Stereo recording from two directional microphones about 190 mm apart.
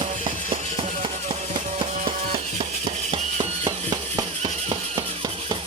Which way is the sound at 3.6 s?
20° right (ahead or behind).